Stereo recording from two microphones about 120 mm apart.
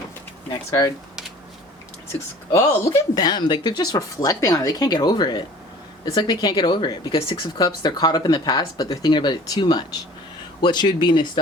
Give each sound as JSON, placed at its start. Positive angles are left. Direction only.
{"t": 2.5, "sound": "speech", "side_deg": 25}